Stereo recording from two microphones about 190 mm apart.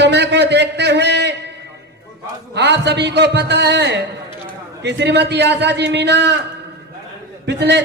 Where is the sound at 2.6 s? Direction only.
65° right (ahead or behind).